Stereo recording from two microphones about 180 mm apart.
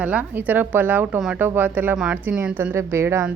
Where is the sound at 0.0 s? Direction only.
10° right (ahead or behind).